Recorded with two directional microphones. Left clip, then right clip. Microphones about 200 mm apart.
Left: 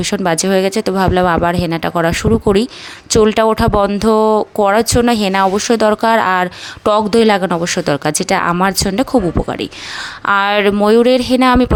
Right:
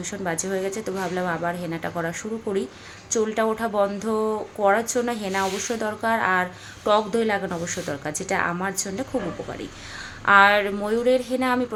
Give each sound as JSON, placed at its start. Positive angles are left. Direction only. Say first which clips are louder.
{"t": 0.0, "sound": "speech", "louder": "left 13 dB", "side_deg": 50}
{"t": 10.2, "sound": "speech", "louder": "left 4 dB", "side_deg": 55}